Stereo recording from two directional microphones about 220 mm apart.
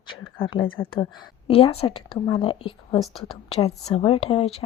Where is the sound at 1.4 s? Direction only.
25° left (ahead or behind).